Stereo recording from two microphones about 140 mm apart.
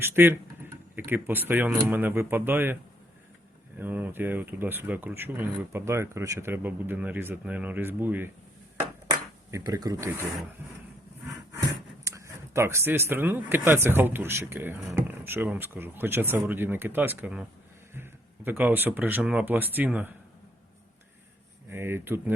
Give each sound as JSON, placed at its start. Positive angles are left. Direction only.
{"t": 0.0, "sound": "speech", "side_deg": -15}
{"t": 3.8, "sound": "speech", "side_deg": -15}
{"t": 9.0, "sound": "finger snapping", "side_deg": -25}
{"t": 12.0, "sound": "speech", "side_deg": -20}
{"t": 21.7, "sound": "speech", "side_deg": -15}